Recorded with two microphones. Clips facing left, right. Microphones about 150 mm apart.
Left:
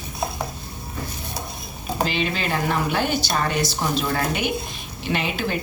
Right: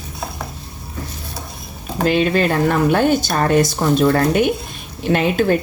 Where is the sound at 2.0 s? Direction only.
50° right (ahead or behind).